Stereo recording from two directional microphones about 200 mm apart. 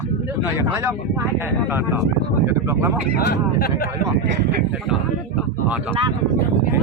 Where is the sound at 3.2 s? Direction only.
55° left (ahead or behind).